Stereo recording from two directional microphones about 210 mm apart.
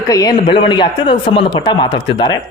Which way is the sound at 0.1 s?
15° left (ahead or behind).